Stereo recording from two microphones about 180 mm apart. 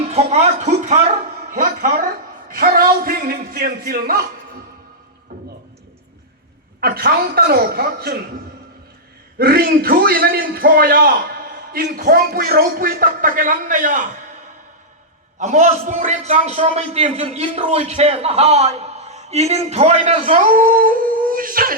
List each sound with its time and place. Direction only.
0.1 s a man's voice: 35° right (ahead or behind); by 4.3 s 55° right (ahead or behind)
5.3 s a sound: 60° right (ahead or behind)
6.7 s a man's voice: 55° right (ahead or behind)
9.4 s a man's voice: 55° right (ahead or behind)
15.4 s a man's voice: 40° right (ahead or behind)